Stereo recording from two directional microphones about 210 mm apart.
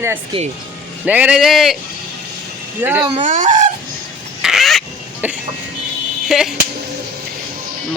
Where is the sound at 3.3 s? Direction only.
40° right (ahead or behind).